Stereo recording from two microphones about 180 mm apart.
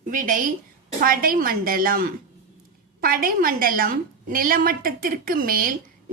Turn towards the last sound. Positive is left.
turn(degrees=-50)  # may be behind; listen again after turning